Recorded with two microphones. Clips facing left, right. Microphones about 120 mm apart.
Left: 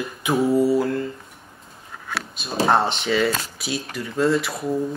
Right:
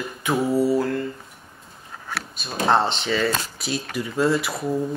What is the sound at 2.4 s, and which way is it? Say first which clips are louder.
Speech: left 3 dB; 25° left (ahead or behind).